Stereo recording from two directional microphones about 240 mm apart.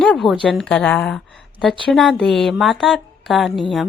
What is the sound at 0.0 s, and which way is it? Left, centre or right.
A woman's voice, centre.